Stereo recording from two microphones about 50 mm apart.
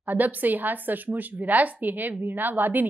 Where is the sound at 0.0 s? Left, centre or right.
Right.